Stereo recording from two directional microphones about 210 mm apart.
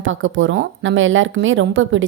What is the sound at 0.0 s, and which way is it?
A woman's voice, 65° right (ahead or behind).